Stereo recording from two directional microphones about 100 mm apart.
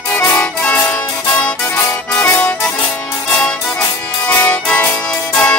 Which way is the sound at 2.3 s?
10° left (ahead or behind).